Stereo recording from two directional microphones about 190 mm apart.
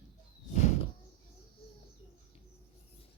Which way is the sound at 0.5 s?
35° left (ahead or behind).